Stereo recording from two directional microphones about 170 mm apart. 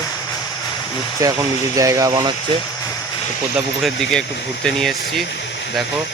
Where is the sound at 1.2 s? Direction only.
20° right (ahead or behind).